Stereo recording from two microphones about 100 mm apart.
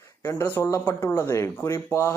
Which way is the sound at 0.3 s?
25° left (ahead or behind).